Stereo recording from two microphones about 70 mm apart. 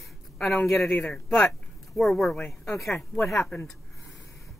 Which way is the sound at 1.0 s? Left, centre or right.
Centre.